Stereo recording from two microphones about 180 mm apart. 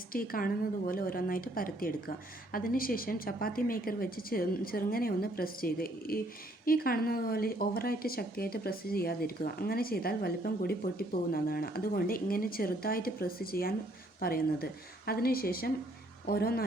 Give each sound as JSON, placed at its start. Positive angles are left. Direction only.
{"t": 0.1, "sound": "a woman's voice", "side_deg": 50}